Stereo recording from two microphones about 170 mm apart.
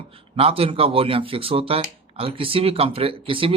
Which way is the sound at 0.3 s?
35° right (ahead or behind).